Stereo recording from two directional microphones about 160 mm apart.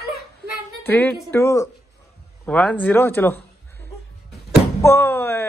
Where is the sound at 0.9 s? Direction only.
10° left (ahead or behind).